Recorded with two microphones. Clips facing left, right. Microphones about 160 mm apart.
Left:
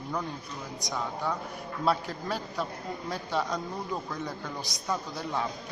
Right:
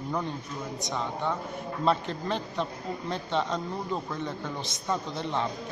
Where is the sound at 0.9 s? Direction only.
5° left (ahead or behind).